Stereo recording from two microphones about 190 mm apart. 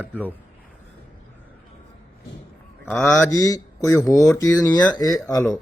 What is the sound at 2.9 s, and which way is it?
Speech, 5° left (ahead or behind).